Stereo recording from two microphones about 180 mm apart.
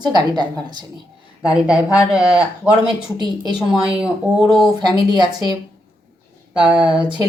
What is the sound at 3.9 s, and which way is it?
Speech, 5° right (ahead or behind).